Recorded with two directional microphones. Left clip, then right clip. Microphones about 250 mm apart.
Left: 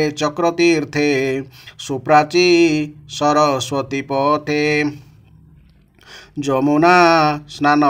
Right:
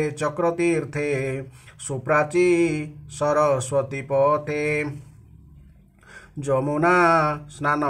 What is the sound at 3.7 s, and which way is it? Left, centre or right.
Mantra, left.